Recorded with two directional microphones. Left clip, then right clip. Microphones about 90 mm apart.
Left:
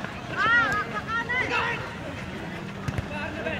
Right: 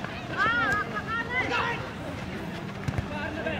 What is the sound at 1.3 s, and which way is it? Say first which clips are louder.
Vehicle: left 2 dB; 5° left (ahead or behind).